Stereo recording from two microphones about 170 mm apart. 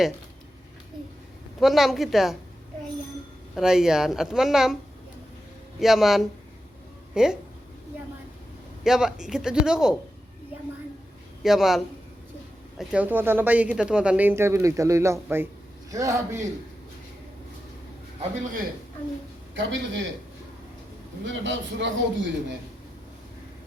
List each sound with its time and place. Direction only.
1.6 s speech: centre (ahead or behind)
3.5 s speech: 5° right (ahead or behind)
5.8 s speech: centre (ahead or behind)
8.8 s speech: 5° right (ahead or behind)
11.4 s speech: centre (ahead or behind)
12.8 s speech: 5° right (ahead or behind)
19.5 s a man's voice: 90° right
21.2 s a man's voice: 90° right